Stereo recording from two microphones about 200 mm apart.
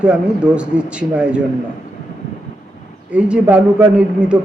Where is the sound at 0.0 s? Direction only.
5° right (ahead or behind).